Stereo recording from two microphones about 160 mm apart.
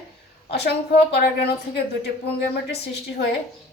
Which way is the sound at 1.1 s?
90° left.